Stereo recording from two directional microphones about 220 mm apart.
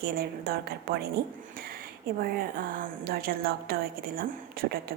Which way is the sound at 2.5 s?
40° right (ahead or behind).